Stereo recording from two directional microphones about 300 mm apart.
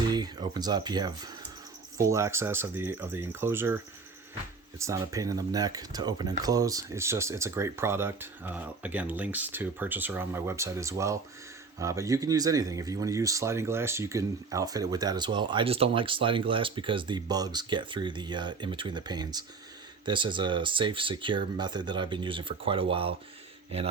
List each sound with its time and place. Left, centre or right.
0.1 s speech: centre
4.8 s speech: centre